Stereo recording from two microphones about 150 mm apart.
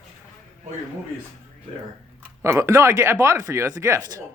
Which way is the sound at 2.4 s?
20° right (ahead or behind).